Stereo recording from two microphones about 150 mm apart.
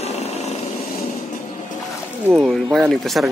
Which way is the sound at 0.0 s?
45° left (ahead or behind).